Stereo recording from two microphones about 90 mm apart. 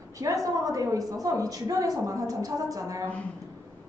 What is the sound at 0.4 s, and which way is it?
A woman's voice, 40° right (ahead or behind).